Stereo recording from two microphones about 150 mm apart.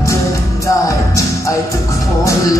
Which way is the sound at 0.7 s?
20° left (ahead or behind).